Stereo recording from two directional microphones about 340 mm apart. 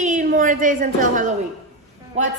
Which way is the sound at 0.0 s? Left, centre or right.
Right.